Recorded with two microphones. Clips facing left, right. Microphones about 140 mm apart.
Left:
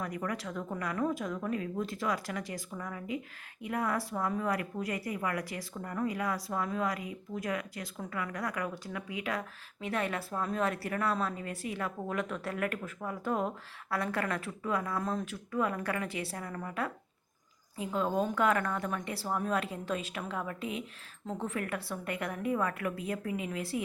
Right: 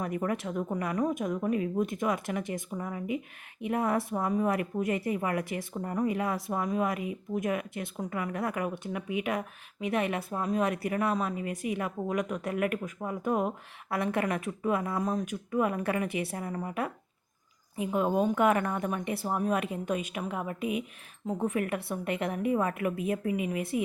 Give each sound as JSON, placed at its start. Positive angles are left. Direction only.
{"t": 0.0, "sound": "a woman's voice", "side_deg": -25}